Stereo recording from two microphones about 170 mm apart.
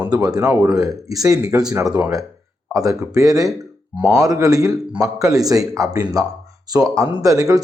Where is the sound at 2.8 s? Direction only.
20° right (ahead or behind).